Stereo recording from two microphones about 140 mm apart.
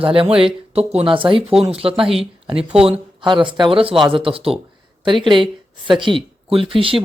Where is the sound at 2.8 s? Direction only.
35° right (ahead or behind).